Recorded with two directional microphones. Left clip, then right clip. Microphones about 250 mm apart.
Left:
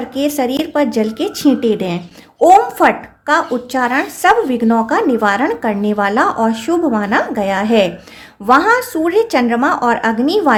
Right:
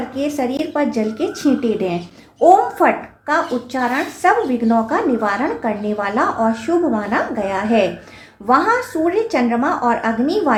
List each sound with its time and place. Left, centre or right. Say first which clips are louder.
0.1 s a woman's voice: left 6 dB; left